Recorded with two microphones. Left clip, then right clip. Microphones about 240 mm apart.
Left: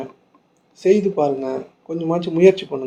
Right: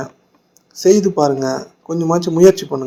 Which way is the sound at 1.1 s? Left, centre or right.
Right.